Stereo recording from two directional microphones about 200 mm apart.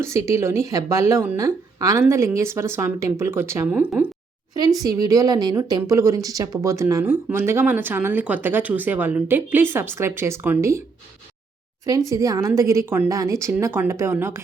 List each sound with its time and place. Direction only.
0.0 s speech: 15° right (ahead or behind)
4.8 s speech: 20° right (ahead or behind)
11.9 s speech: 20° right (ahead or behind)